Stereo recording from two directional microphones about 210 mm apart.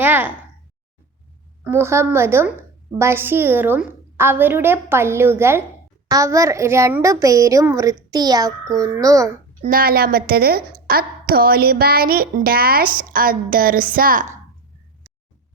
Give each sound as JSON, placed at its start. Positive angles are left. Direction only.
{"t": 0.0, "sound": "a woman's voice", "side_deg": -10}
{"t": 1.6, "sound": "a woman's voice", "side_deg": -10}
{"t": 9.6, "sound": "a woman's voice", "side_deg": -40}